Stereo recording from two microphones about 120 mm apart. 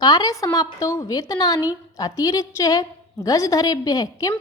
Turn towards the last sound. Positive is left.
turn(degrees=30)  # may be behind; listen again after turning